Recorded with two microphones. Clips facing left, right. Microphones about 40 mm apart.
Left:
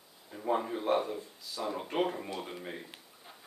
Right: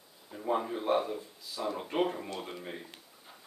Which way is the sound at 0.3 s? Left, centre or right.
Centre.